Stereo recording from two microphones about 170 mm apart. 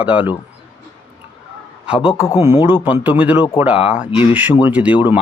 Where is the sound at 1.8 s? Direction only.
5° right (ahead or behind).